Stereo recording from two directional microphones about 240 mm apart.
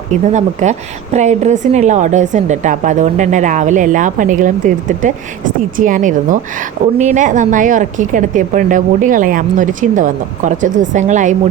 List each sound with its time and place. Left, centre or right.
0.1 s a woman's voice: right